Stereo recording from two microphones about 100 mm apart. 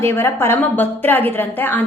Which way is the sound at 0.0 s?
25° left (ahead or behind).